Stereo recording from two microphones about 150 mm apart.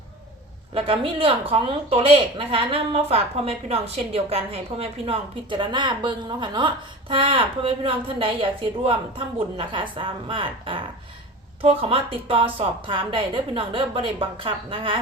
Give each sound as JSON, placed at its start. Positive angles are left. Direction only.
{"t": 0.7, "sound": "speech", "side_deg": -35}